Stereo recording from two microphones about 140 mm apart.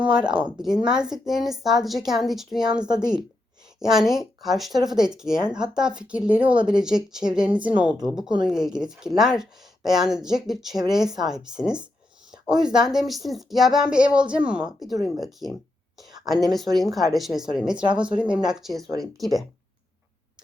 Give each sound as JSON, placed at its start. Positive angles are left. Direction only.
{"t": 0.0, "sound": "speech", "side_deg": -5}
{"t": 2.8, "sound": "a woman's voice", "side_deg": -30}
{"t": 3.8, "sound": "a woman's voice", "side_deg": -5}